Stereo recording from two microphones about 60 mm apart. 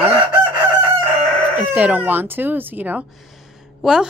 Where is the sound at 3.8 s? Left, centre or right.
Centre.